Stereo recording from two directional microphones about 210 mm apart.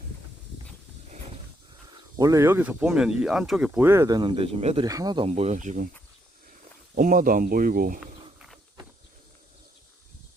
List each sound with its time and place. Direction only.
1.9 s speech: 15° right (ahead or behind)
5.3 s speech: 35° right (ahead or behind)
6.9 s speech: 40° right (ahead or behind)
8.0 s walk: 5° right (ahead or behind)